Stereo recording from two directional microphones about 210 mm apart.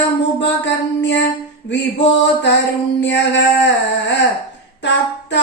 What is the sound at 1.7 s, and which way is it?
Speech, 60° left (ahead or behind).